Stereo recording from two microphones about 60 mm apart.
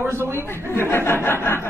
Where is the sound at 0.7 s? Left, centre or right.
Left.